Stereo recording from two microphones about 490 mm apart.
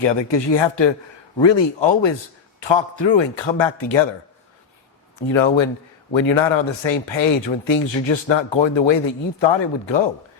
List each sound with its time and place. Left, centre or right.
0.0 s speech: left
5.1 s speech: left